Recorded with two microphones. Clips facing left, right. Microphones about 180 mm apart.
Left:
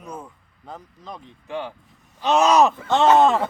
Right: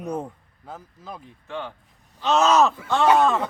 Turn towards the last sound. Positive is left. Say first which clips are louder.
# left 3 dB
turn(degrees=25)  # may be behind; listen again after turning